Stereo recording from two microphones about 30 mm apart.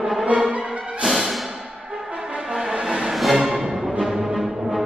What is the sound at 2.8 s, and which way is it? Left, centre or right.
Music, centre.